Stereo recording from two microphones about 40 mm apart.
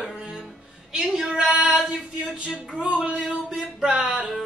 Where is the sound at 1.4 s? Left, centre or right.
Right.